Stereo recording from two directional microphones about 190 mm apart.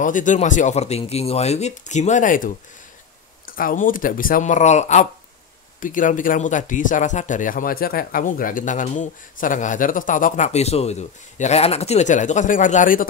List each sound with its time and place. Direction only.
0.0 s speech: 40° left (ahead or behind)